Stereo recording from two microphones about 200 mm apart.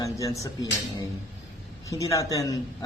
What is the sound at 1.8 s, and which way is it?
Speech, 15° left (ahead or behind).